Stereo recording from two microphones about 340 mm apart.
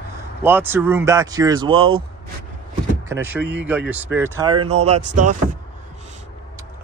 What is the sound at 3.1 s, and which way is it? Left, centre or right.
Speech, centre.